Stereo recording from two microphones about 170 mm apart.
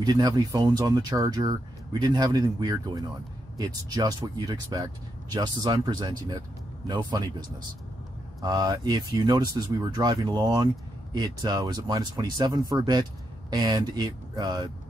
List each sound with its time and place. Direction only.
0.0 s speech: 25° right (ahead or behind)